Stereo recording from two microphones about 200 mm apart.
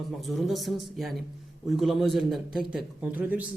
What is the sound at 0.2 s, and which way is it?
A woman's voice, centre (ahead or behind).